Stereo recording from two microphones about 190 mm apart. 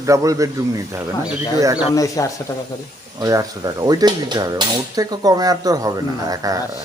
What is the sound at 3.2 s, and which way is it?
Speech, 20° right (ahead or behind).